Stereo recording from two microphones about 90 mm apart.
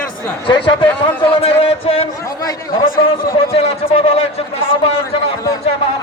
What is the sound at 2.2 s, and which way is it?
Speech, 40° left (ahead or behind).